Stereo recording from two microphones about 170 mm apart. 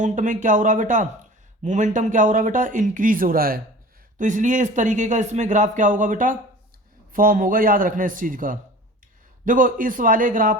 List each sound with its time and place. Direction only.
0.0 s speech: 50° right (ahead or behind)
4.2 s speech: 50° right (ahead or behind)